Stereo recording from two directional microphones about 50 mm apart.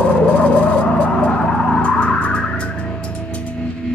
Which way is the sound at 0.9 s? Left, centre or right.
Left.